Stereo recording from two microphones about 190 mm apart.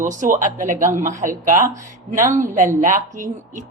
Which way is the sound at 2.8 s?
40° right (ahead or behind).